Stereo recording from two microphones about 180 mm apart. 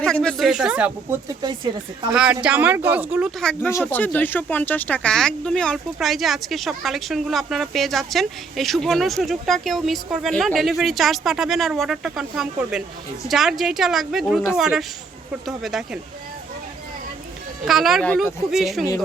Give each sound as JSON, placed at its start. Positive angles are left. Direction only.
{"t": 0.0, "sound": "speech", "side_deg": 5}
{"t": 1.3, "sound": "speech", "side_deg": -20}
{"t": 2.1, "sound": "speech", "side_deg": -5}
{"t": 3.7, "sound": "speech", "side_deg": 15}
{"t": 17.7, "sound": "speech", "side_deg": 0}